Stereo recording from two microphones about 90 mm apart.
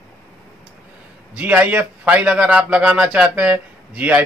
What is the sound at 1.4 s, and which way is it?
Speech, 20° right (ahead or behind).